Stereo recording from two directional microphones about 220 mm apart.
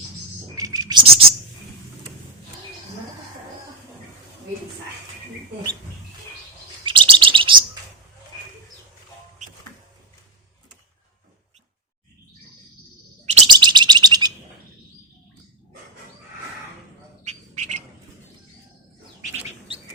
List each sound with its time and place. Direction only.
0.5 s a sound: 15° right (ahead or behind)
6.8 s chirp: 20° right (ahead or behind)
13.2 s bird: 25° right (ahead or behind)
17.2 s bird: 30° right (ahead or behind)